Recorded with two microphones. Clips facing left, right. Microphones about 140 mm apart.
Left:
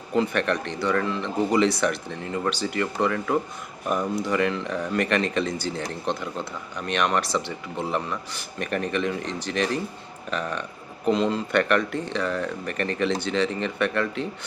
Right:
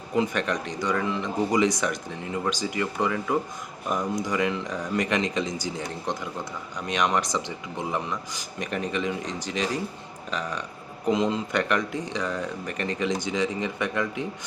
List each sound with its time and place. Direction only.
0.2 s speech: 15° right (ahead or behind)
3.8 s speech: 10° left (ahead or behind)
4.2 s speech: 15° right (ahead or behind)
9.5 s speech: 65° left (ahead or behind)
10.3 s speech: 15° right (ahead or behind)